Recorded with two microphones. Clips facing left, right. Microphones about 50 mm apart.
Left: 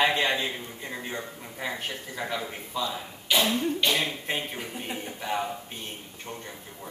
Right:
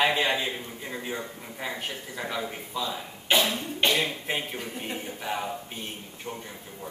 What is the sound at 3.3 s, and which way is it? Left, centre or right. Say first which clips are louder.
Speech: right 1 dB; right.